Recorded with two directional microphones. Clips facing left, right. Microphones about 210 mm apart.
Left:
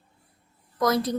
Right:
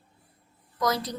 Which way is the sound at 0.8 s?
55° left (ahead or behind).